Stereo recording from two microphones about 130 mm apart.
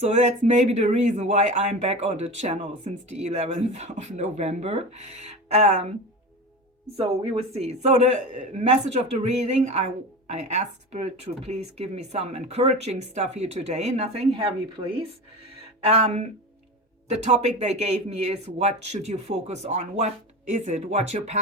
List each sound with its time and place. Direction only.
0.0 s speech: 60° right (ahead or behind)
7.2 s speech: 50° right (ahead or behind)
15.9 s speech: 50° right (ahead or behind)